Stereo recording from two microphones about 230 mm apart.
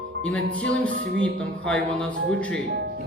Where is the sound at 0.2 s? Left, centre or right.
Centre.